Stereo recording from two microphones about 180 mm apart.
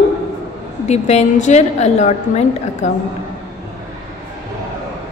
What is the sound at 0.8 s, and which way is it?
A woman's voice, 40° left (ahead or behind).